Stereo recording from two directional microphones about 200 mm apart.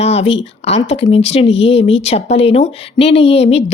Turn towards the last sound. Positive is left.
turn(degrees=30)  # may be behind; listen again after turning